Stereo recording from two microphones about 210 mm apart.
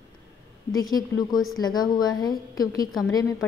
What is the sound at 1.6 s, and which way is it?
A woman's voice, 20° left (ahead or behind).